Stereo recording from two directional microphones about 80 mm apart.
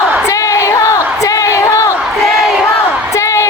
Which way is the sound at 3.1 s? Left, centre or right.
Left.